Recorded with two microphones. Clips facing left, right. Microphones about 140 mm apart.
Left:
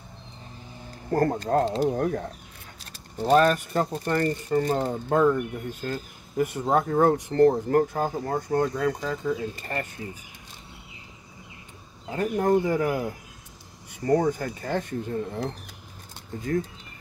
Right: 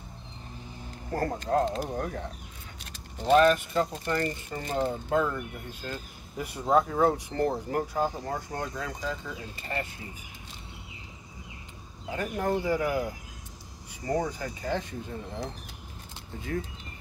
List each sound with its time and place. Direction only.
1.1 s speech: 45° left (ahead or behind)
12.1 s speech: 40° left (ahead or behind)